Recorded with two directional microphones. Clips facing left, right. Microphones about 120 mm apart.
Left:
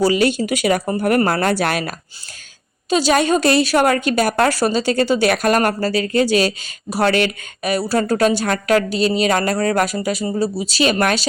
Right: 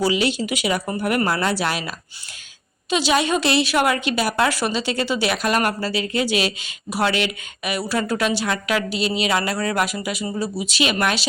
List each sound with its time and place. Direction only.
0.0 s a woman's voice: 45° left (ahead or behind)